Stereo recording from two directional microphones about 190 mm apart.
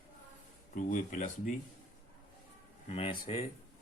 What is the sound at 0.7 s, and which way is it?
Speech, 40° left (ahead or behind).